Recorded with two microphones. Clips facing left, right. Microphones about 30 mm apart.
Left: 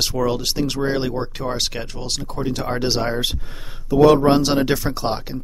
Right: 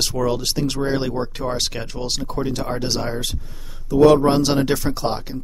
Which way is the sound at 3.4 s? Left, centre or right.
Left.